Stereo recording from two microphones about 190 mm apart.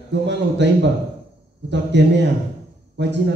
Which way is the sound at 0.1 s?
65° right (ahead or behind).